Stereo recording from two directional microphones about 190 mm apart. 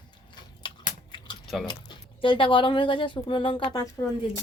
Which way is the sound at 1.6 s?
25° left (ahead or behind).